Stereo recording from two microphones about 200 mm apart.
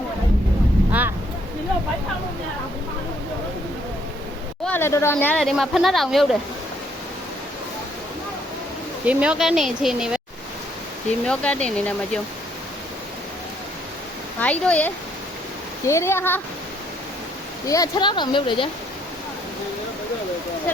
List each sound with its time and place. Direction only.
0.9 s boat: 10° right (ahead or behind)
4.6 s speech: 10° left (ahead or behind)
9.0 s speech: 5° right (ahead or behind)
11.3 s speech: 5° left (ahead or behind)
14.3 s speech: 5° left (ahead or behind)
17.7 s speech: 20° left (ahead or behind)